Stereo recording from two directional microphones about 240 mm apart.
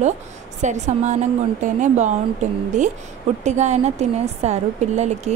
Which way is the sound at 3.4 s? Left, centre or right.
Right.